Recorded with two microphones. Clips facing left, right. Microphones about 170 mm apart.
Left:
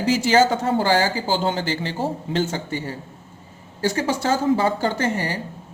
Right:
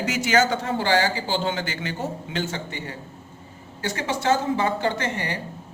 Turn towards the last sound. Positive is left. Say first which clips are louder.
# left 3 dB
turn(degrees=40)  # may be behind; listen again after turning